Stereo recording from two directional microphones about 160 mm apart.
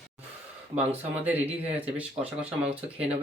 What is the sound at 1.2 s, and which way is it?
Speech, 10° right (ahead or behind).